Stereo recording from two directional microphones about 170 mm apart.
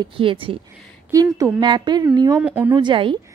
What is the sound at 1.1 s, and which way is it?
A woman's voice, 20° right (ahead or behind).